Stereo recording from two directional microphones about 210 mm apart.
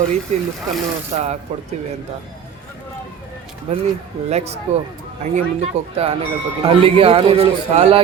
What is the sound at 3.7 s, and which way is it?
Speech, 30° right (ahead or behind).